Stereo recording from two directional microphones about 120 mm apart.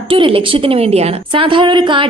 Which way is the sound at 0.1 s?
50° right (ahead or behind).